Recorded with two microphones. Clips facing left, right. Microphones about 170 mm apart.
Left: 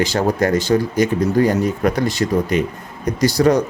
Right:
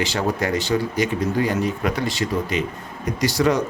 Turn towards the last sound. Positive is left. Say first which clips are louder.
# left 5 dB
turn(degrees=40)  # may be behind; listen again after turning